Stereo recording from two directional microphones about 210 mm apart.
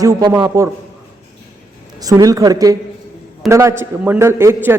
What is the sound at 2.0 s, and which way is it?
A man's voice, 15° right (ahead or behind).